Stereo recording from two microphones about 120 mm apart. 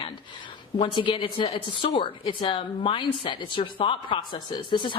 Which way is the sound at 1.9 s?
35° left (ahead or behind).